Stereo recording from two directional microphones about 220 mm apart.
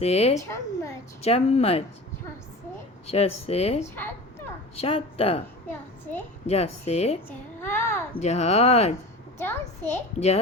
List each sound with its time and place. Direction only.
0.0 s speech: 30° left (ahead or behind)
0.3 s a child's voice: 15° left (ahead or behind)
1.2 s speech: 30° left (ahead or behind)
3.1 s speech: 30° left (ahead or behind)
3.9 s a sound: 10° left (ahead or behind)
4.8 s speech: 25° left (ahead or behind)
6.5 s speech: 30° left (ahead or behind)
7.3 s a child's voice: 10° left (ahead or behind)
8.2 s speech: 30° left (ahead or behind)
9.4 s a child's voice: 10° left (ahead or behind)
10.2 s speech: 30° left (ahead or behind)